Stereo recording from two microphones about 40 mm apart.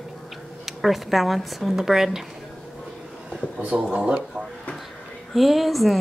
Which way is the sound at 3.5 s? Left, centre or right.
Right.